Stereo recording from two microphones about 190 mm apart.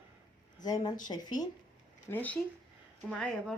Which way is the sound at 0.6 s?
20° left (ahead or behind).